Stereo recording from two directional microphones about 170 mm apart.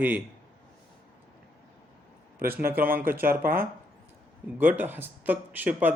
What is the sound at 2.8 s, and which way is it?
Speech, 60° right (ahead or behind).